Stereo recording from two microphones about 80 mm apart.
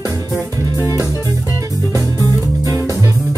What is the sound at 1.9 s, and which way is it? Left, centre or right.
Music, right.